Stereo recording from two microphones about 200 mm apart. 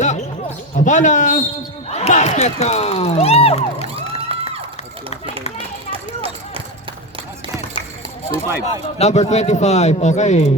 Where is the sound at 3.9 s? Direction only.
30° right (ahead or behind).